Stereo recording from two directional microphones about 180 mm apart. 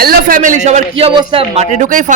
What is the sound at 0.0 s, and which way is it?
A man's voice, 55° right (ahead or behind).